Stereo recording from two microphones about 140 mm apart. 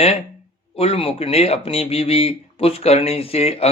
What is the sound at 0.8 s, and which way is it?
Speech, 45° left (ahead or behind).